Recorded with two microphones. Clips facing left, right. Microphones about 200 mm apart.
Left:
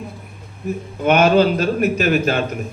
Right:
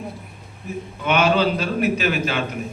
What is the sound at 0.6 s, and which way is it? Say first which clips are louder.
A man's voice: left 6 dB; 45° left (ahead or behind).